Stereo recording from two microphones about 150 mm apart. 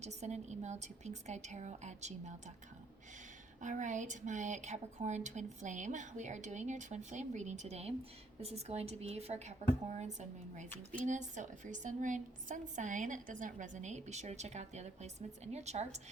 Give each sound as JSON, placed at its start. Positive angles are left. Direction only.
{"t": 0.0, "sound": "a woman's voice", "side_deg": -50}
{"t": 3.6, "sound": "a woman's voice", "side_deg": -55}